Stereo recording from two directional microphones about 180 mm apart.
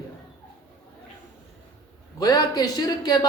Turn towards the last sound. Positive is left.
turn(degrees=20)  # may be behind; listen again after turning